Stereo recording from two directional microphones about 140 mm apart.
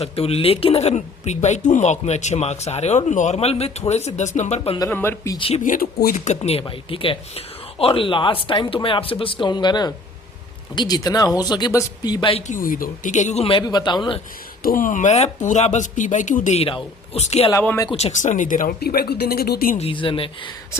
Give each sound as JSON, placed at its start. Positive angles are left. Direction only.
{"t": 0.0, "sound": "speech", "side_deg": 45}
{"t": 4.9, "sound": "speech", "side_deg": 15}
{"t": 5.4, "sound": "speech", "side_deg": 45}
{"t": 5.6, "sound": "a man's voice", "side_deg": 80}
{"t": 12.5, "sound": "speech", "side_deg": 80}
{"t": 14.6, "sound": "speech", "side_deg": 80}
{"t": 16.6, "sound": "speech", "side_deg": 45}
{"t": 19.8, "sound": "speech", "side_deg": 40}